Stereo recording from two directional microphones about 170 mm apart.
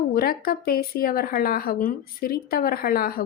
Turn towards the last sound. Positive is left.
turn(degrees=60)  # may be behind; listen again after turning